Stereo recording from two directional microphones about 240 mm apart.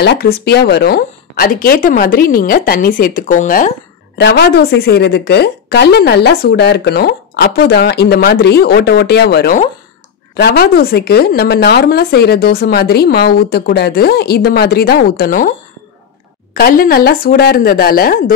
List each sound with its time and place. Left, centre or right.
0.0 s speech: left
4.2 s speech: left
16.5 s speech: left